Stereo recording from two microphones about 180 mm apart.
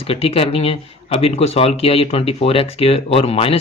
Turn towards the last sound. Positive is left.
turn(degrees=35)  # may be behind; listen again after turning